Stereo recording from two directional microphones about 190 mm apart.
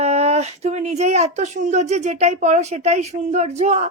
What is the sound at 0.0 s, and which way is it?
Speech, 35° right (ahead or behind).